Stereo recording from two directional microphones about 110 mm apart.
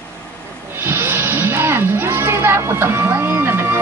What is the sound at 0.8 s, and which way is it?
Music, 20° right (ahead or behind).